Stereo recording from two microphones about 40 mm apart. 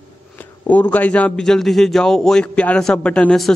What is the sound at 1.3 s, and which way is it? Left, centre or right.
A man's voice, centre.